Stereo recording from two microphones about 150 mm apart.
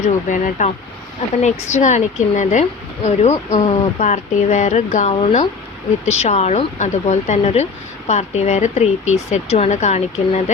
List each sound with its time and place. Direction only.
0.0 s speech: 55° left (ahead or behind)
5.1 s speech: 35° left (ahead or behind)
6.1 s speech: 45° left (ahead or behind)